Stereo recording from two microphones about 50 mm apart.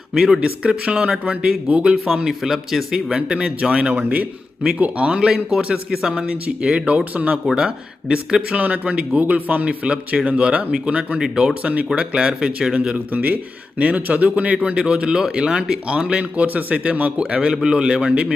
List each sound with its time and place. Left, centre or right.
0.1 s speech: centre
0.6 s speech: right
2.2 s speech: centre
3.2 s a man's voice: centre
6.3 s speech: right
7.5 s speech: centre; by 9.6 s right
9.6 s speech: right
11.2 s speech: centre
11.6 s speech: right
11.9 s speech: centre
13.1 s speech: right